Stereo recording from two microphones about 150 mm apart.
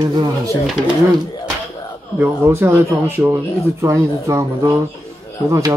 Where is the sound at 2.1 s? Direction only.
15° right (ahead or behind).